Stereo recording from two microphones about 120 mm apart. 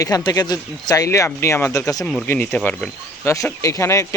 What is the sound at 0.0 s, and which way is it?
Speech, 30° left (ahead or behind).